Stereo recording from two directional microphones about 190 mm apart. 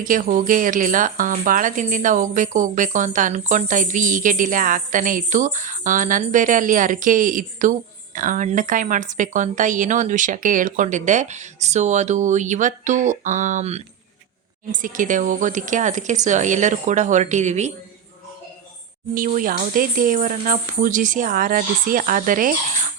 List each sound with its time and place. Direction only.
0.0 s speech: 45° right (ahead or behind)
19.1 s speech: 45° right (ahead or behind)